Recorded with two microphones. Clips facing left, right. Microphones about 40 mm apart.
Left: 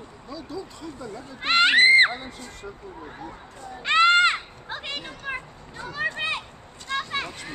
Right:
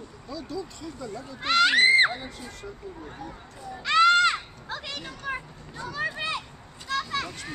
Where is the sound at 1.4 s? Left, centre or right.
Left.